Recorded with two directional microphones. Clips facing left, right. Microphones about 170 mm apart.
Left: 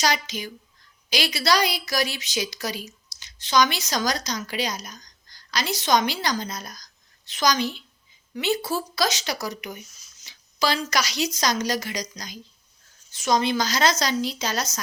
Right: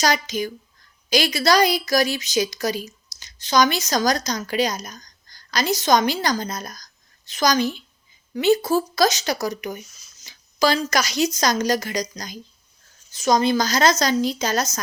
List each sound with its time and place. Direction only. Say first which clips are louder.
0.0 s speech: right 4 dB; 45° right (ahead or behind)